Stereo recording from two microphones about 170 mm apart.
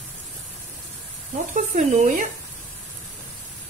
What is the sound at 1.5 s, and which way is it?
Speech, 45° right (ahead or behind).